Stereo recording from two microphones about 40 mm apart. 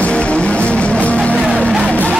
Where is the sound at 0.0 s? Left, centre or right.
Left.